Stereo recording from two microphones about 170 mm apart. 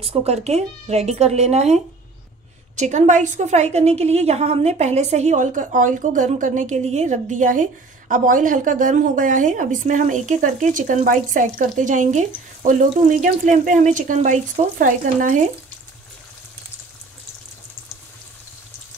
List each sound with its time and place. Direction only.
0.0 s a woman's voice: 35° right (ahead or behind)